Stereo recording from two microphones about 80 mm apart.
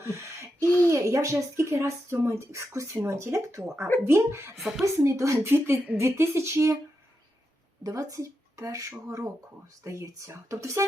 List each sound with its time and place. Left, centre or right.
0.0 s owl: right
0.9 s speech: right
4.5 s speech: centre
4.9 s speech: right
7.9 s speech: right